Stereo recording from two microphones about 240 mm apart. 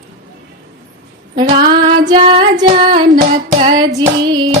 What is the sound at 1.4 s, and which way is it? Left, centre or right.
Hands, right.